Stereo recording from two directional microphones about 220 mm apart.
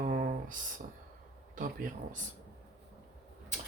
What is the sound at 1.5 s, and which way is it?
Speech, 35° right (ahead or behind).